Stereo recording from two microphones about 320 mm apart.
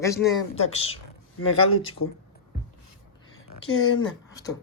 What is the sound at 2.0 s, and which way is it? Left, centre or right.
Speech, left.